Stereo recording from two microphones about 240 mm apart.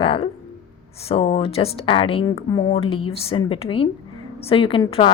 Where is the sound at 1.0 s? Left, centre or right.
Left.